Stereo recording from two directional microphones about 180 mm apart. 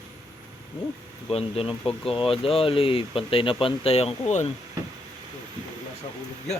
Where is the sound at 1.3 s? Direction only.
35° left (ahead or behind).